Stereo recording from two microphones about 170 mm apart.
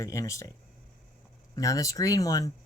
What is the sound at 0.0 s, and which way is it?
Speech, 20° left (ahead or behind).